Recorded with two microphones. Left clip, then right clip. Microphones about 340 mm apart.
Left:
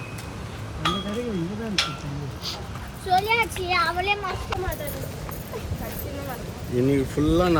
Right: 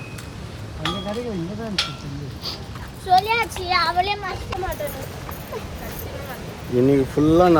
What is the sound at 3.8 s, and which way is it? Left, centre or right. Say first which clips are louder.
Speech: right 3 dB; right.